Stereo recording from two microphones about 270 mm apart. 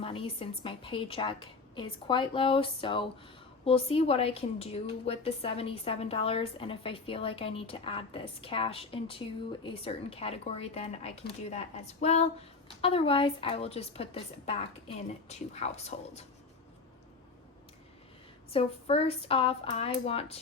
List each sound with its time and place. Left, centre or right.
0.0 s a woman's voice: centre
18.5 s a woman's voice: left